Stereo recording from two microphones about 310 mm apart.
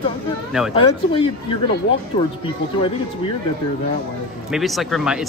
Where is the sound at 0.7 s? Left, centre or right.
Centre.